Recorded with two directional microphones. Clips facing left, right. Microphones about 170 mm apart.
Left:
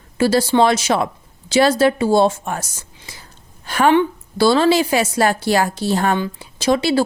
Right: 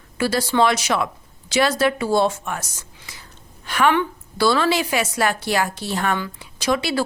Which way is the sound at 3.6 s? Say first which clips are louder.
Left 4 dB; 35° left (ahead or behind).